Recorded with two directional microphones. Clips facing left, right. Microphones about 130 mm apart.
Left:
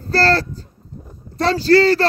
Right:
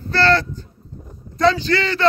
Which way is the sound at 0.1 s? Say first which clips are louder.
Even; 35° left (ahead or behind).